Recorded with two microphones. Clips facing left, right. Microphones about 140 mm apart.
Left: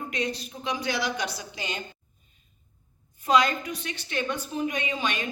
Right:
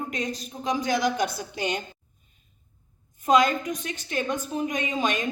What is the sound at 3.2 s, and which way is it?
Speech, 45° right (ahead or behind).